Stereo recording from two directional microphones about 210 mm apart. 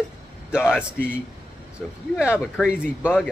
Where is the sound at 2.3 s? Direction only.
5° right (ahead or behind).